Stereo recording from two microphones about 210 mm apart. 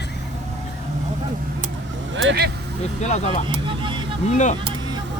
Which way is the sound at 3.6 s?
25° right (ahead or behind).